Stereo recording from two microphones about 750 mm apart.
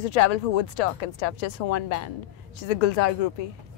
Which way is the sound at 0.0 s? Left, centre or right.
Left.